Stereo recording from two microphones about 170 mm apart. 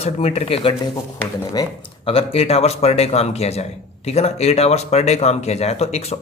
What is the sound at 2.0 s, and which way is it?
Speech, 35° left (ahead or behind).